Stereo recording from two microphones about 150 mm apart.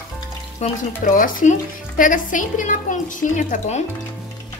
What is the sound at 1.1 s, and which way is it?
A woman's voice, 60° left (ahead or behind).